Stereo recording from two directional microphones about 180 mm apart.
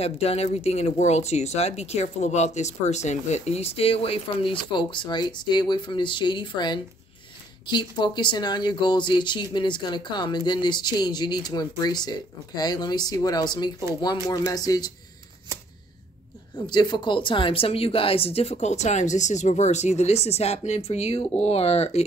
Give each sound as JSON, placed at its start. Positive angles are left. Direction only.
{"t": 0.0, "sound": "speech", "side_deg": 35}
{"t": 16.5, "sound": "speech", "side_deg": 25}